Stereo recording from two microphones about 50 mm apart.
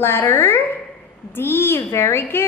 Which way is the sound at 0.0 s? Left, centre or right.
Left.